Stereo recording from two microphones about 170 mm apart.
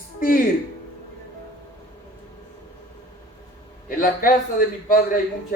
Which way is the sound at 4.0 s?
55° left (ahead or behind).